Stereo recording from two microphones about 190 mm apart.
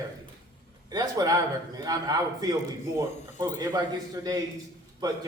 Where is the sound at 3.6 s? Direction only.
20° right (ahead or behind).